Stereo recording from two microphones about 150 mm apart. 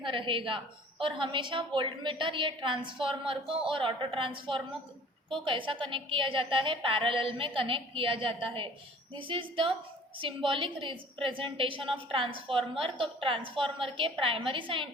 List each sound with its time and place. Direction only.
0.0 s a woman's voice: 35° right (ahead or behind)